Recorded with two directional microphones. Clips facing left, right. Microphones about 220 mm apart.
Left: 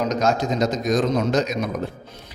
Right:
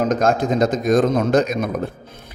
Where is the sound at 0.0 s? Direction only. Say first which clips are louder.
Right 3 dB; 50° right (ahead or behind).